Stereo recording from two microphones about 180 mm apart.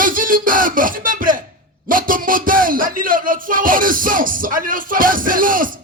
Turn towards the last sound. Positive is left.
turn(degrees=-50)  # may be behind; listen again after turning